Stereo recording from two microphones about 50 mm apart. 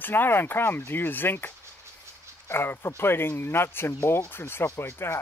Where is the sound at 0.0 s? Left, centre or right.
Left.